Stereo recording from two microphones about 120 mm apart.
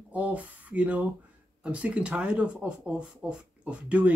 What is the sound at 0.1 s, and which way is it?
Speech, 10° right (ahead or behind).